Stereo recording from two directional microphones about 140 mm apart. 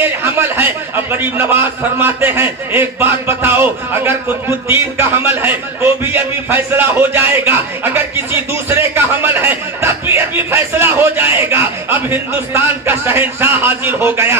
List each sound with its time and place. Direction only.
0.0 s a man's voice: 15° right (ahead or behind)